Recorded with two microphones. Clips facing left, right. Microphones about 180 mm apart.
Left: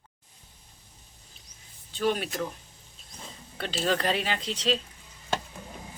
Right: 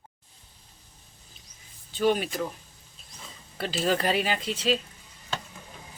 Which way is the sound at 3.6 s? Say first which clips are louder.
Right 2 dB; 5° right (ahead or behind).